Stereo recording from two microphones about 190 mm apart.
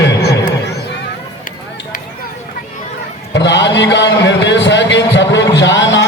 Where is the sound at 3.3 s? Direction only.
70° left (ahead or behind).